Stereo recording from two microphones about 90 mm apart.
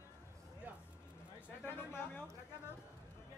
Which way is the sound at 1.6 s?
25° left (ahead or behind).